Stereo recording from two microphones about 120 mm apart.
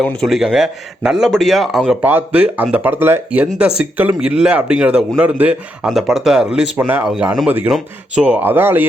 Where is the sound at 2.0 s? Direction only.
15° right (ahead or behind).